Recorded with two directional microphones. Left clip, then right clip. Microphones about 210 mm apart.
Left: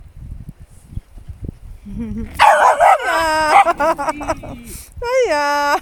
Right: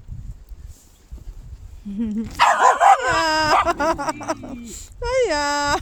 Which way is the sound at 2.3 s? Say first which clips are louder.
Left 5 dB; 15° left (ahead or behind).